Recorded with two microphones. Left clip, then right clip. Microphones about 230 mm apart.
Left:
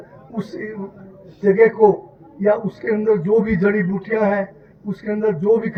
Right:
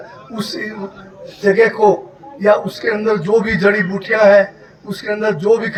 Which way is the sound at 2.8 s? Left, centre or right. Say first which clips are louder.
Right 2 dB; right.